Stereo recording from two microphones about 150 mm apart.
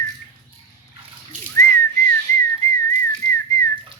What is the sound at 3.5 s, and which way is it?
Whistling, 25° left (ahead or behind).